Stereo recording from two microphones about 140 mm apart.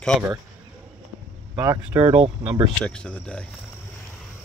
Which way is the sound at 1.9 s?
35° right (ahead or behind).